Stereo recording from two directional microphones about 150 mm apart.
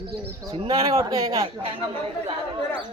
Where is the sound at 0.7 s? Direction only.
25° right (ahead or behind).